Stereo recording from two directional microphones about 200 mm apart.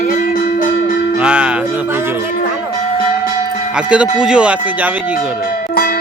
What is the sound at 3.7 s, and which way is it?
Speech, 5° right (ahead or behind).